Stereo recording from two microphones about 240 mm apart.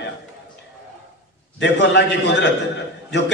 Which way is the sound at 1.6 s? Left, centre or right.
Left.